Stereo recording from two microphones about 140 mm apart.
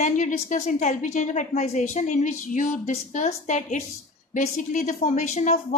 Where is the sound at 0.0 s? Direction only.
65° left (ahead or behind).